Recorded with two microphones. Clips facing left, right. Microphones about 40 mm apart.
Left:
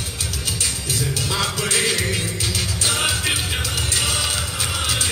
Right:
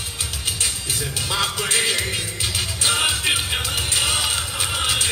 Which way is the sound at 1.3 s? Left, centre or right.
Centre.